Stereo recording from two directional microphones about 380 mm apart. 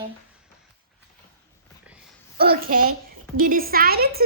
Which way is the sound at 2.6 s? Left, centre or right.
Right.